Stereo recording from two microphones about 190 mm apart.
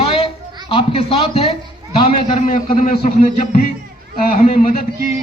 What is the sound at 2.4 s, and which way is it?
A woman's voice, 45° left (ahead or behind).